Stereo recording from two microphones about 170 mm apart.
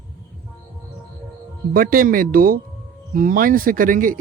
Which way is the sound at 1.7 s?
55° right (ahead or behind).